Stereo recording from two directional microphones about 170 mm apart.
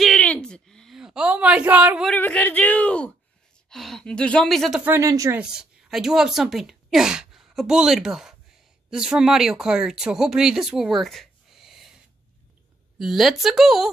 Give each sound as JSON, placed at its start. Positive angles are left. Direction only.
{"t": 0.0, "sound": "a sound", "side_deg": 5}
{"t": 2.0, "sound": "a sound", "side_deg": 10}
{"t": 3.7, "sound": "a woman's voice", "side_deg": 0}
{"t": 4.9, "sound": "speech", "side_deg": -20}
{"t": 5.4, "sound": "speech", "side_deg": -5}
{"t": 13.0, "sound": "a woman's voice", "side_deg": 0}